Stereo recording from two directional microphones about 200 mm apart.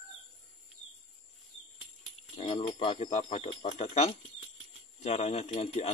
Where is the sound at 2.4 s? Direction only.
30° left (ahead or behind).